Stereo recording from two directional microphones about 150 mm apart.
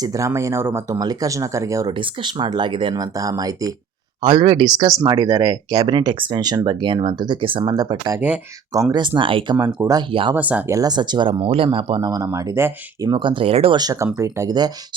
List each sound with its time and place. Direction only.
0.0 s speech: 20° right (ahead or behind)
1.9 s speech: 30° right (ahead or behind)
10.3 s speech: 10° right (ahead or behind)
10.8 s speech: 25° right (ahead or behind)
13.1 s speech: 35° right (ahead or behind)
13.7 s speech: 25° right (ahead or behind)